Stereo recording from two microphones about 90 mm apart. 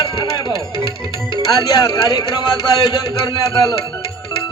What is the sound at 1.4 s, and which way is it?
Speech, 45° left (ahead or behind).